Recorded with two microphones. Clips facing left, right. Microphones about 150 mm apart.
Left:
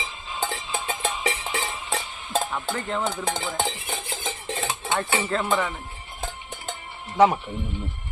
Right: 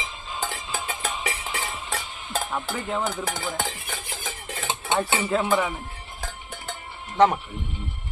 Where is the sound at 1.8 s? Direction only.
25° left (ahead or behind).